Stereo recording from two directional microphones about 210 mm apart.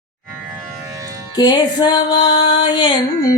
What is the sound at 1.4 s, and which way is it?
Mantra, 20° left (ahead or behind).